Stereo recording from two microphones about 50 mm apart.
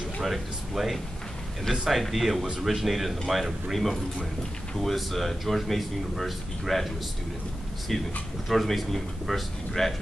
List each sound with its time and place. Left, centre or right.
0.2 s speech: centre
7.9 s speech: centre